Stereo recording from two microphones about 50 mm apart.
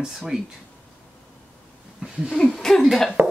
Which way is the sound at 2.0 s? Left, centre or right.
Right.